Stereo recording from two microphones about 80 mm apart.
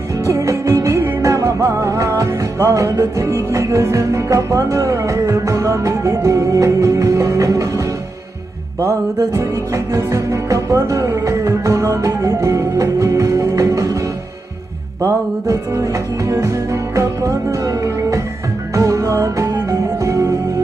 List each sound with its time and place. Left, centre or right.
0.3 s music: right
9.4 s music: right
15.0 s music: right